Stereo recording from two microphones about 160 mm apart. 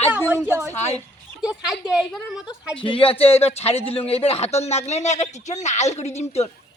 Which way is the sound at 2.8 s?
35° left (ahead or behind).